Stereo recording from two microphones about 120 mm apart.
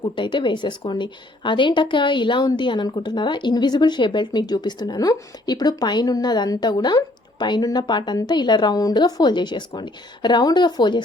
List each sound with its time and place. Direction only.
0.0 s a woman's voice: 40° left (ahead or behind)